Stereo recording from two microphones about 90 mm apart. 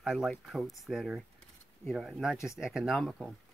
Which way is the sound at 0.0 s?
5° right (ahead or behind).